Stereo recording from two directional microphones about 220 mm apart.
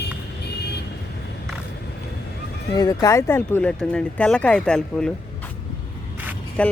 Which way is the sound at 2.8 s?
15° left (ahead or behind).